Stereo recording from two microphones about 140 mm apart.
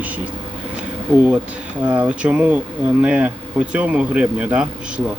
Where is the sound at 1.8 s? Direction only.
10° right (ahead or behind).